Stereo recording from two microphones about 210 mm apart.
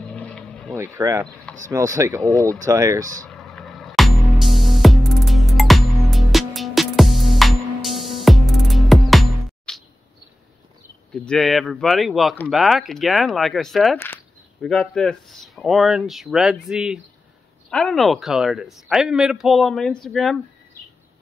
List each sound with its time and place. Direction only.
0.0 s boat: 5° left (ahead or behind)
0.9 s speech: 15° right (ahead or behind)
3.3 s music: centre (ahead or behind)
11.2 s speech: centre (ahead or behind)